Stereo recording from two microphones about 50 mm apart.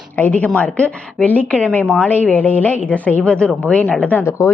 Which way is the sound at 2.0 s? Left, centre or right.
Left.